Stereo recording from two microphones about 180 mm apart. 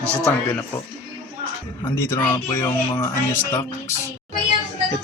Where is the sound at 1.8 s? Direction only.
10° left (ahead or behind).